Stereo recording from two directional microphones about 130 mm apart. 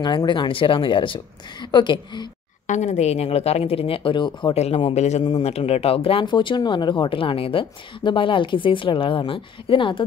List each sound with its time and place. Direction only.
0.0 s speech: 35° left (ahead or behind)
2.6 s speech: 65° left (ahead or behind); by 4.6 s 40° left (ahead or behind)
4.6 s speech: 50° left (ahead or behind)